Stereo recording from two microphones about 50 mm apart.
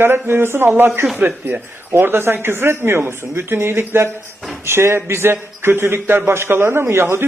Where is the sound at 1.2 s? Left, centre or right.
Right.